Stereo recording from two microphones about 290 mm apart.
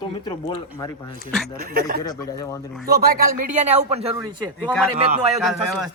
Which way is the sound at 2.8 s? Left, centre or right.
Right.